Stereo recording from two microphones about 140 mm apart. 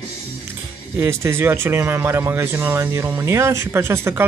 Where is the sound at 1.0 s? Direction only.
20° right (ahead or behind).